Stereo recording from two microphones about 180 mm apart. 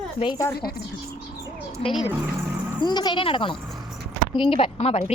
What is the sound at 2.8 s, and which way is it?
A woman's voice, 25° left (ahead or behind).